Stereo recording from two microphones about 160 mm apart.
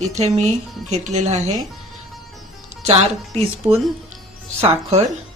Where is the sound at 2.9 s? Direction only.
40° right (ahead or behind).